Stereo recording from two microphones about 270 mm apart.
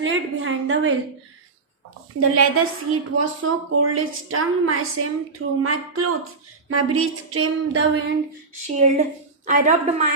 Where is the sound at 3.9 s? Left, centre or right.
Right.